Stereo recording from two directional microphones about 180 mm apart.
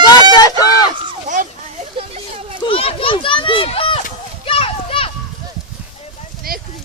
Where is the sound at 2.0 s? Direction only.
30° right (ahead or behind).